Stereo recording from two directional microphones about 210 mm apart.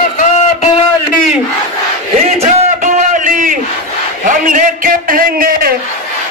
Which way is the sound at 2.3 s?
35° right (ahead or behind).